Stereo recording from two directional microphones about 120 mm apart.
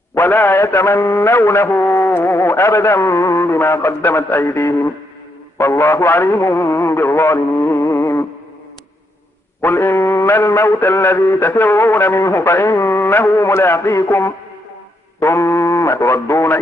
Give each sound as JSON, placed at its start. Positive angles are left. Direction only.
{"t": 0.1, "sound": "mantra", "side_deg": 25}
{"t": 9.6, "sound": "mantra", "side_deg": 20}